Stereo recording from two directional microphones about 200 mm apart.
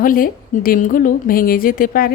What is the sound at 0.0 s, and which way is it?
A woman's voice, 45° left (ahead or behind).